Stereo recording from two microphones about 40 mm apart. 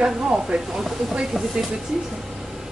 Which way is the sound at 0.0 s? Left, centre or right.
Right.